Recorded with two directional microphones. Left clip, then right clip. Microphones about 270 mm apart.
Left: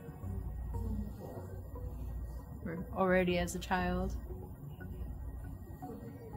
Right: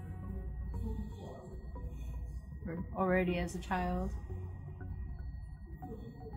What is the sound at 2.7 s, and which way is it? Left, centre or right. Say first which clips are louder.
A woman's voice: left 2 dB; centre.